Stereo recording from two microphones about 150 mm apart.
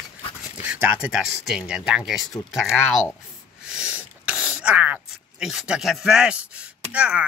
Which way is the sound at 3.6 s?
5° right (ahead or behind).